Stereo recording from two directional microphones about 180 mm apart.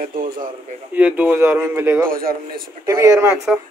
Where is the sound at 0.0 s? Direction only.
50° right (ahead or behind).